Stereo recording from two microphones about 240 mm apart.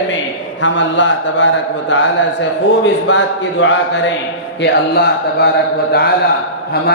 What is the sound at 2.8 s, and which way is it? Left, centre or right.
A man's voice, left.